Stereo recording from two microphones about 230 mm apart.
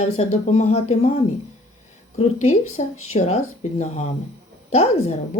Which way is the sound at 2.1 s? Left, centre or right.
Left.